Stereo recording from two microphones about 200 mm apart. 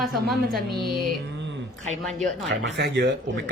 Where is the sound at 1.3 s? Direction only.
60° right (ahead or behind).